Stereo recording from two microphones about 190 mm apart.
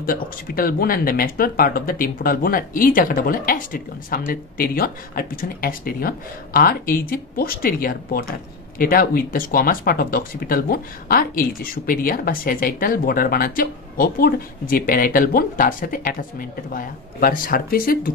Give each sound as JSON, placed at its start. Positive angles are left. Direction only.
{"t": 0.0, "sound": "speech", "side_deg": 50}